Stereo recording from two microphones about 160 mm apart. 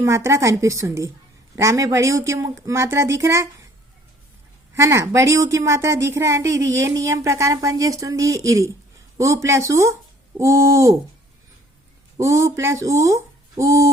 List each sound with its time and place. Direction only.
0.0 s a woman's voice: 15° right (ahead or behind)
4.7 s a woman's voice: 15° right (ahead or behind)
12.1 s speech: 20° right (ahead or behind)